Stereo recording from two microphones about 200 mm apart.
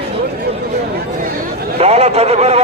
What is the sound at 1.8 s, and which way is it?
Speech, 30° right (ahead or behind).